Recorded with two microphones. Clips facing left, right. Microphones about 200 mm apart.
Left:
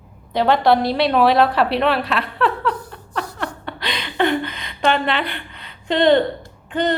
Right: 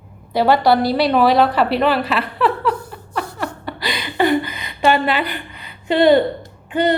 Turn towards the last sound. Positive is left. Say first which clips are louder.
# right 3 dB
turn(degrees=-10)  # may be behind; listen again after turning